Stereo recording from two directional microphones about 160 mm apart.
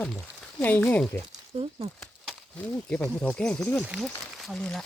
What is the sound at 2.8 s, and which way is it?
Speech, 5° left (ahead or behind).